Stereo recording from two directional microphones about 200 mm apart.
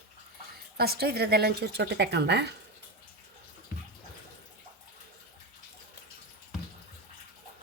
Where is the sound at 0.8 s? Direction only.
50° right (ahead or behind).